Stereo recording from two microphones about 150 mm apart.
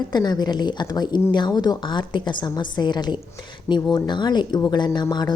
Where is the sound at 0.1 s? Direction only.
30° left (ahead or behind).